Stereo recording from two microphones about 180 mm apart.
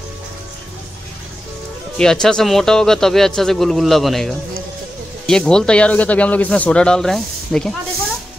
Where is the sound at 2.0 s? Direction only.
5° left (ahead or behind).